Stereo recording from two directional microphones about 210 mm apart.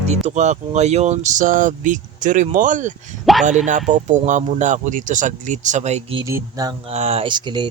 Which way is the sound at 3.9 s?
35° right (ahead or behind).